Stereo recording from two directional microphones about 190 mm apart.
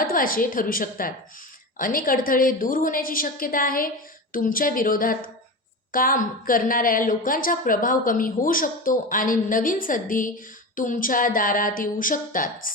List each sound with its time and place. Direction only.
0.0 s a woman's voice: 50° left (ahead or behind)